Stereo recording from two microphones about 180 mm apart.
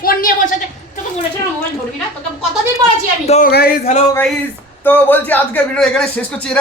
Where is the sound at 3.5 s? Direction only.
60° left (ahead or behind).